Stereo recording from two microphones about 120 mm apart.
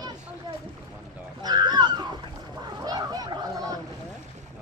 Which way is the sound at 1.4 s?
35° right (ahead or behind).